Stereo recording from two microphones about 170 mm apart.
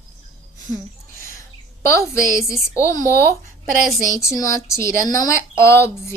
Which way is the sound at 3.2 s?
60° right (ahead or behind).